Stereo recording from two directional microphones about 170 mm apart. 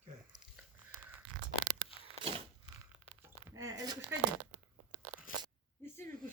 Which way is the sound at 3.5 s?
20° right (ahead or behind).